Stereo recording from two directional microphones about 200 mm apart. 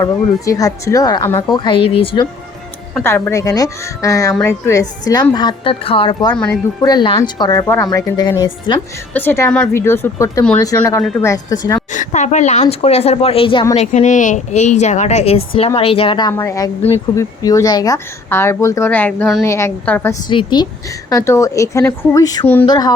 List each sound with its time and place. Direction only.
0.4 s a woman's voice: 15° left (ahead or behind)
1.5 s a woman's voice: 25° left (ahead or behind)
3.0 s a woman's voice: 10° left (ahead or behind)
6.3 s speech: 5° left (ahead or behind)
6.8 s a woman's voice: 20° left (ahead or behind)
11.9 s a woman's voice: 40° left (ahead or behind)
13.8 s a woman's voice: 40° left (ahead or behind); by 19.5 s 5° left (ahead or behind)
19.5 s a woman's voice: 15° left (ahead or behind)
20.2 s a woman's voice: 20° left (ahead or behind)